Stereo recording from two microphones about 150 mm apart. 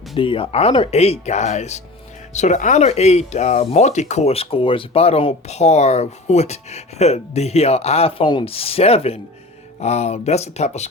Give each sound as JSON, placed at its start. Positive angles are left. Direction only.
{"t": 0.2, "sound": "speech", "side_deg": 35}